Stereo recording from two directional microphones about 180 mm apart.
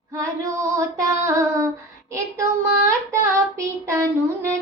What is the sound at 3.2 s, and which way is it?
Speech, 15° right (ahead or behind).